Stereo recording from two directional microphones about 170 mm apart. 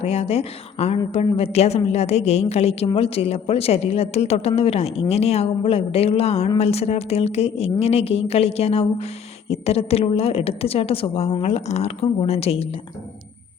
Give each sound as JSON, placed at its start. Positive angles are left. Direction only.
{"t": 0.0, "sound": "a woman's voice", "side_deg": 35}